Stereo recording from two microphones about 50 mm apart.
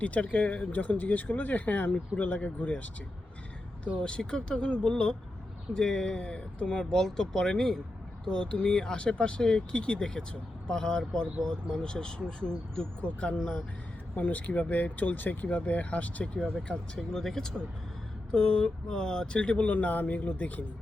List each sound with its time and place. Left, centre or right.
0.0 s speech: left
4.0 s speech: centre
14.2 s speech: left
16.6 s speech: centre
18.3 s speech: left